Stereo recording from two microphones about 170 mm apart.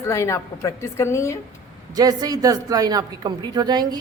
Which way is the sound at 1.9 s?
20° right (ahead or behind).